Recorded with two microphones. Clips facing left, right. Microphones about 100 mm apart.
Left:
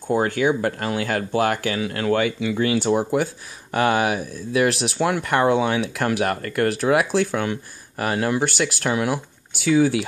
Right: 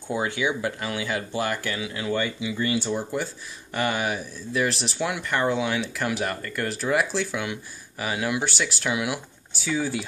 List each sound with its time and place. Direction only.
0.1 s speech: 50° left (ahead or behind); by 4.9 s 65° left (ahead or behind)
4.9 s speech: 45° left (ahead or behind)
5.2 s speech: 65° left (ahead or behind); by 9.2 s 40° left (ahead or behind)
9.5 s speech: 70° left (ahead or behind)